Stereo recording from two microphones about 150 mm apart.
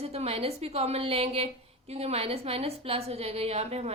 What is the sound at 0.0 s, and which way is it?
A woman's voice, 45° right (ahead or behind).